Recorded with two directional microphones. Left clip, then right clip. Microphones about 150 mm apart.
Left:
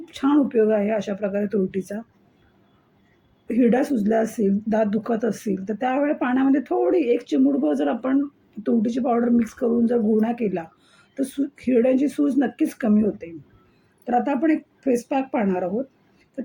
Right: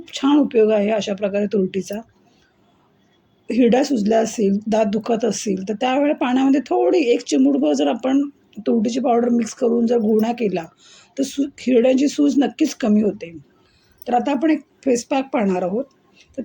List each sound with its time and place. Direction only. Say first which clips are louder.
0.3 s speech: right 4 dB; 30° right (ahead or behind)
3.5 s speech: right 4 dB; 30° right (ahead or behind)
5.9 s speech: right 4 dB; 40° right (ahead or behind)
14.0 s speech: right 3 dB; 35° right (ahead or behind)